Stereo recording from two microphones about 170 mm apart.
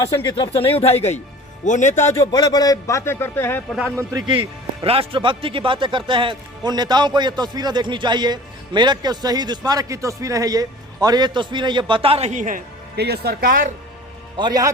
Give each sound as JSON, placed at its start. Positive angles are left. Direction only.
{"t": 0.0, "sound": "speech", "side_deg": 20}
{"t": 2.1, "sound": "a man's voice", "side_deg": 20}
{"t": 3.7, "sound": "speech", "side_deg": 0}
{"t": 4.3, "sound": "speech", "side_deg": -30}
{"t": 13.0, "sound": "speech", "side_deg": -70}
{"t": 14.3, "sound": "speech", "side_deg": -25}